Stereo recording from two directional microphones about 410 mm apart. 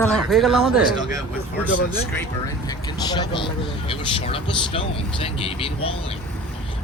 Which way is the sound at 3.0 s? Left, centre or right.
Centre.